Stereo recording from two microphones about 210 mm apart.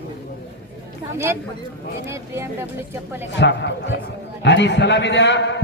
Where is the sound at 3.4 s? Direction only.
55° left (ahead or behind).